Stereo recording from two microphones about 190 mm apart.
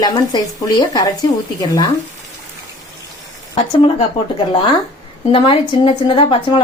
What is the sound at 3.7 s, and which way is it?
A woman's voice, 30° left (ahead or behind).